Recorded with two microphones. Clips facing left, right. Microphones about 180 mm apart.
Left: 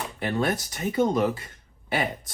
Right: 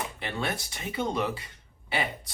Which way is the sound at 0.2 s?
45° left (ahead or behind).